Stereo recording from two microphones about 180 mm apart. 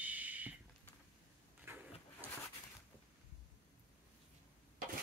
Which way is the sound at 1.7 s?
15° right (ahead or behind).